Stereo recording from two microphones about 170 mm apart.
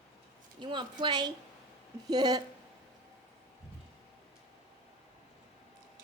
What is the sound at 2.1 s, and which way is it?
Speech, 25° right (ahead or behind).